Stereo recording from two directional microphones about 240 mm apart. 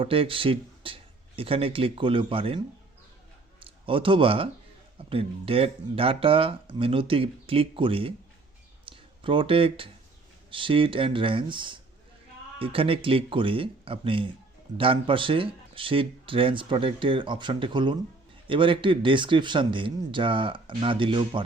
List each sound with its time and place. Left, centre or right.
0.0 s speech: right
3.6 s speech: right
8.8 s a sound: right
10.5 s speech: right